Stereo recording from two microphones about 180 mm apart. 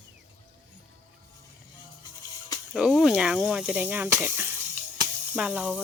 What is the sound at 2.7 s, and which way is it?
Speech, centre (ahead or behind).